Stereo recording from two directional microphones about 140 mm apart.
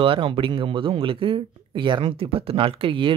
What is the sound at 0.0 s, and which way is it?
Speech, 40° right (ahead or behind).